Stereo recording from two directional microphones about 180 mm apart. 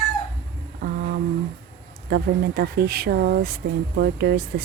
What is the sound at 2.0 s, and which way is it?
Speech, 60° right (ahead or behind).